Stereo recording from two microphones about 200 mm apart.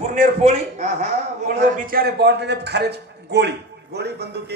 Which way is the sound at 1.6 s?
45° right (ahead or behind).